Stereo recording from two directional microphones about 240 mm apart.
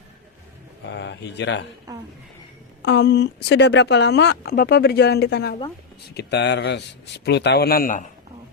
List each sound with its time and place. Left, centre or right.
0.9 s speech: left
1.9 s speech: centre
2.8 s speech: left